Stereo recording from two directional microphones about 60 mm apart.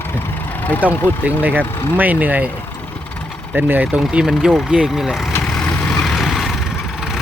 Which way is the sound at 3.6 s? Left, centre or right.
Right.